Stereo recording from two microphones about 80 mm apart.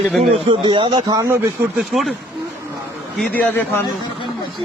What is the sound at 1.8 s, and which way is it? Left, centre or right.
Speech, centre.